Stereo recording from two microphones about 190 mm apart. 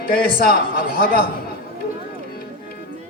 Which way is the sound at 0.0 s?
50° left (ahead or behind).